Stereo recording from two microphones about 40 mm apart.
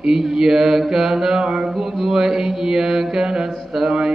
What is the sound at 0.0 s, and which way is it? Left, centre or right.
Mantra, centre.